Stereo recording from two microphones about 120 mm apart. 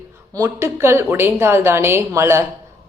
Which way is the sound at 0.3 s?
25° right (ahead or behind).